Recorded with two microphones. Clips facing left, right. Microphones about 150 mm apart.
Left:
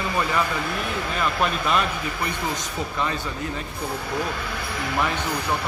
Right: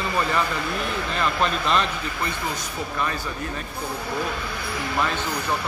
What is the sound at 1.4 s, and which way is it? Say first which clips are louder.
Speech: even; 10° left (ahead or behind).